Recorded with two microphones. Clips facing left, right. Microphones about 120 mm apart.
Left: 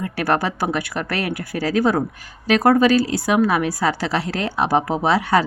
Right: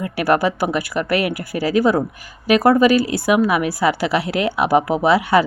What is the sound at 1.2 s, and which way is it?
Speech, 5° right (ahead or behind).